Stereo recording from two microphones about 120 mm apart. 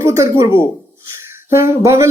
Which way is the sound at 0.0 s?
25° right (ahead or behind).